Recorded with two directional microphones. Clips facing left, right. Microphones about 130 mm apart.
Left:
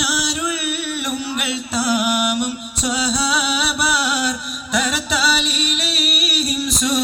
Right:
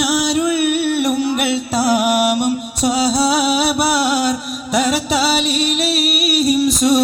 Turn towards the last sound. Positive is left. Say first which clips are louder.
# right 7 dB
turn(degrees=-40)  # may be behind; listen again after turning